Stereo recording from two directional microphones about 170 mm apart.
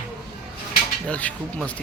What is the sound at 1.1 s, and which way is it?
Speech, 10° left (ahead or behind).